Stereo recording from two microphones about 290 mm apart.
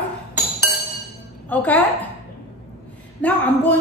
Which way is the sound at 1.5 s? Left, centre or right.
Centre.